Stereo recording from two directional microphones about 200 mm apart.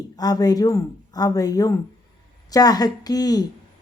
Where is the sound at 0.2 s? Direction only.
20° left (ahead or behind).